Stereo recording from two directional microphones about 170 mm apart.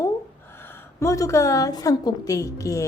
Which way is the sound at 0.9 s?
20° left (ahead or behind).